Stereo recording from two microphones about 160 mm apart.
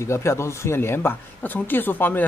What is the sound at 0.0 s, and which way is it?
Speech, 15° left (ahead or behind).